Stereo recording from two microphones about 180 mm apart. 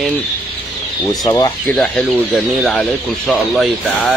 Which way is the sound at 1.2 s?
20° left (ahead or behind).